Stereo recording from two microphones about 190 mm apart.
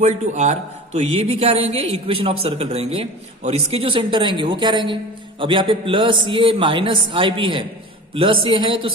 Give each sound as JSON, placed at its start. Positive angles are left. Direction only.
{"t": 0.0, "sound": "a man's voice", "side_deg": -35}